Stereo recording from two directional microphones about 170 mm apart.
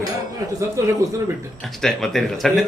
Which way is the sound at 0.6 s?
15° right (ahead or behind).